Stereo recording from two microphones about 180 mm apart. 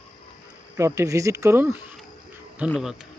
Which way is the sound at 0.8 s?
15° right (ahead or behind).